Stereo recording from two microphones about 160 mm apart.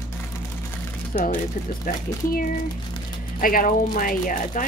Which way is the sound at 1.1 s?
60° left (ahead or behind).